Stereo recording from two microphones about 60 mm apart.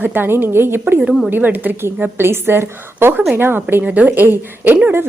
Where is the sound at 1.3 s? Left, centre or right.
Right.